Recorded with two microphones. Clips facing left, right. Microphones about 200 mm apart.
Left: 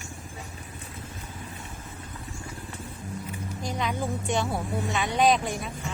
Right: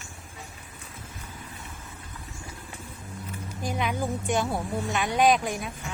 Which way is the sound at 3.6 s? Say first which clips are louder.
Right 1 dB; 5° right (ahead or behind).